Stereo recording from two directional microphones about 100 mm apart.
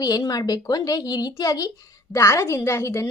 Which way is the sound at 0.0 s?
40° left (ahead or behind).